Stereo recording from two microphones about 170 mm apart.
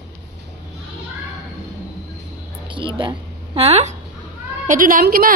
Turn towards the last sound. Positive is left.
turn(degrees=-55)  # may be behind; listen again after turning